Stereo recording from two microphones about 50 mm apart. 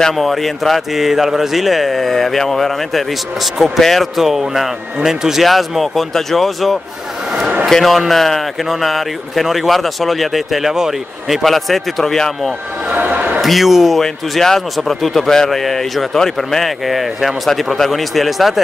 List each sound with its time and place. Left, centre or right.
0.1 s a man's voice: centre
12.9 s a sound: right
13.4 s a man's voice: centre